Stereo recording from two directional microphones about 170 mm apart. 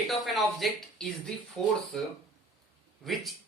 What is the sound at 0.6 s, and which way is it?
Speech, 5° left (ahead or behind).